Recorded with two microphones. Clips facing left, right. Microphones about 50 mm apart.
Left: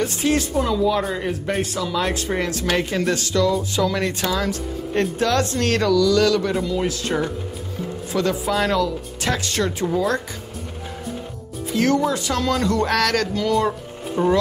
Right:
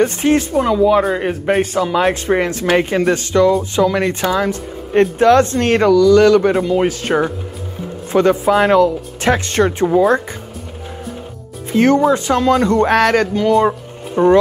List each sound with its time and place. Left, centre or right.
0.0 s speech: right
6.6 s a man's voice: right
11.7 s speech: right